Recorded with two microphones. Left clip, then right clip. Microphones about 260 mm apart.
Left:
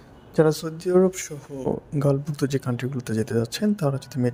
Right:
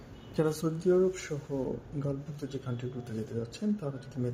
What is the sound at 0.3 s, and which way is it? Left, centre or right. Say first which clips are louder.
Speech: left 10 dB; left.